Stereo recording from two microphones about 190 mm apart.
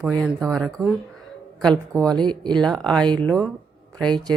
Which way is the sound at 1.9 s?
5° left (ahead or behind).